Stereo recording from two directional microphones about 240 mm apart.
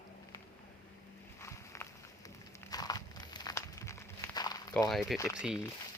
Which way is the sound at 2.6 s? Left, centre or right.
Centre.